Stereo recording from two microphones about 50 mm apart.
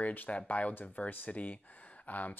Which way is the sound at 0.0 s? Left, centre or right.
Left.